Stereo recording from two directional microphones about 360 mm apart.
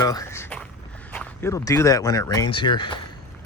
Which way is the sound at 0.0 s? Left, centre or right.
Centre.